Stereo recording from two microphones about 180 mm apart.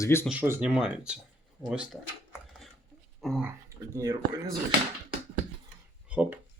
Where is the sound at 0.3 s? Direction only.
10° right (ahead or behind).